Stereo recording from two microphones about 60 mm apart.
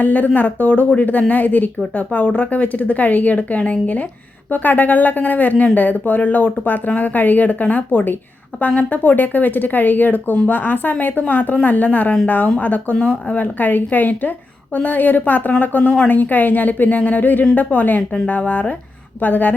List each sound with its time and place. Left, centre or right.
0.0 s a woman's voice: left